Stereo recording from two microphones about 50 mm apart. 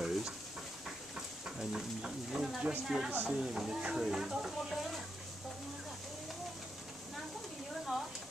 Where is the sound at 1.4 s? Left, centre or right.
Centre.